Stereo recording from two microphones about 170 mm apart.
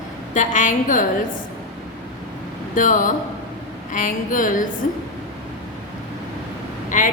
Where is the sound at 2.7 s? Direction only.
50° left (ahead or behind).